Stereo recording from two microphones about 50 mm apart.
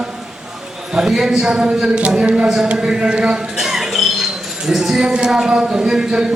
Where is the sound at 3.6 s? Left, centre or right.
Centre.